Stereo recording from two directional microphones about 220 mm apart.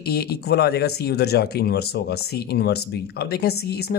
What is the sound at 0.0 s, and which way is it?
Speech, 45° left (ahead or behind).